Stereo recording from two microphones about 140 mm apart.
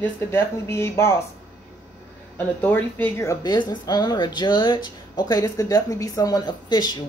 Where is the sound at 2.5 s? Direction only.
15° left (ahead or behind).